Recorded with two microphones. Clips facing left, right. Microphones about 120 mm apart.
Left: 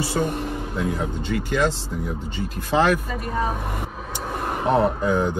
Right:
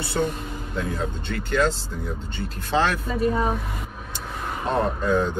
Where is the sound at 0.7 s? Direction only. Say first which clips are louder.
Left 1 dB; 15° left (ahead or behind).